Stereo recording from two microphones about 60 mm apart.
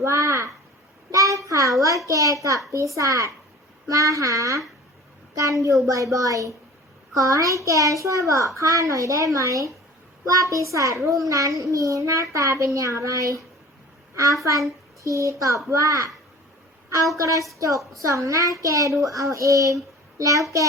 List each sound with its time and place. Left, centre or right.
0.0 s a child's voice: right
14.4 s a child's voice: right
17.2 s a child's voice: right